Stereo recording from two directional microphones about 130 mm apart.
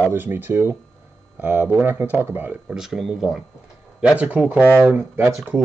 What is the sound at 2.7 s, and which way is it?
Speech, 5° right (ahead or behind).